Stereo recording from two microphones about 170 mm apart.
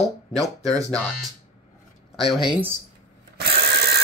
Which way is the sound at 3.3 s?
70° right (ahead or behind).